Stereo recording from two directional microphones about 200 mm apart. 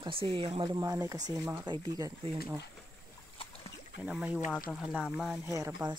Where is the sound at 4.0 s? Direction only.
5° right (ahead or behind).